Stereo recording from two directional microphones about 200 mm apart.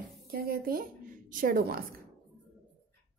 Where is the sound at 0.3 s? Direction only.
50° right (ahead or behind).